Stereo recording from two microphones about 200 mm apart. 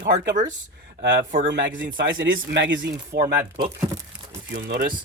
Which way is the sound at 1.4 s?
65° right (ahead or behind).